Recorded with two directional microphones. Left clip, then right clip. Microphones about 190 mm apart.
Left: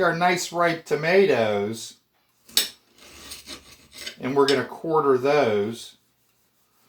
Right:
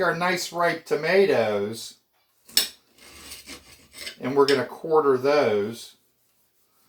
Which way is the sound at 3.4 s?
Centre (ahead or behind).